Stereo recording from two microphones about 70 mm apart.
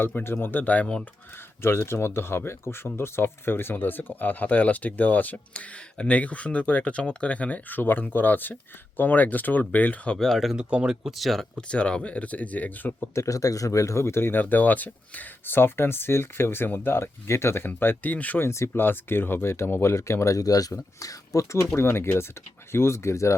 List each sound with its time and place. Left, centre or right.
0.0 s speech: left
1.6 s speech: left
10.2 s speech: centre
10.6 s speech: centre
11.7 s speech: centre
13.1 s speech: left
18.4 s speech: left
21.6 s speech: left